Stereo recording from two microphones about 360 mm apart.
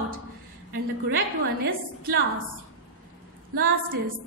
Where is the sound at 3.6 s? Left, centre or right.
Right.